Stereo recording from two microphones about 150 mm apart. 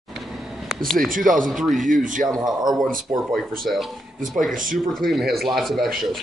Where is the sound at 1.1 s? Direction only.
60° right (ahead or behind).